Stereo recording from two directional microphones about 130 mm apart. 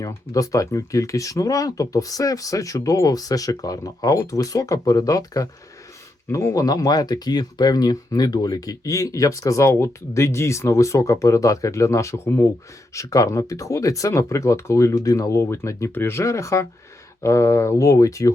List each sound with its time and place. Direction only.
0.0 s speech: 25° left (ahead or behind)